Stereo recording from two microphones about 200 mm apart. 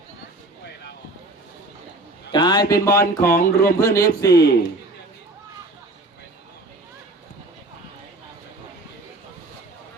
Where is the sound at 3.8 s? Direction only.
15° left (ahead or behind).